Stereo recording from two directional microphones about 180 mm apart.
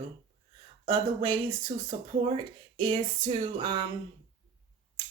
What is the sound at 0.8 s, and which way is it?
Speech, 25° right (ahead or behind).